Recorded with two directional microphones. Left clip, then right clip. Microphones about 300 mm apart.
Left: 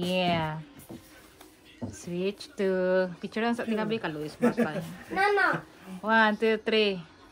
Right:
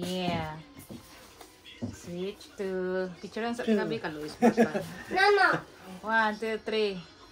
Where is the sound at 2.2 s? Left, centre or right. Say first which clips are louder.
Left 6 dB; left.